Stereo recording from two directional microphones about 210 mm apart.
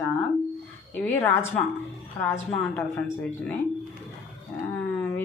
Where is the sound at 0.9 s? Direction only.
10° left (ahead or behind).